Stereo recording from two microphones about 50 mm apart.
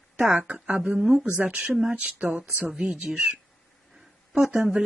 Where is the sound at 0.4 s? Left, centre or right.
Right.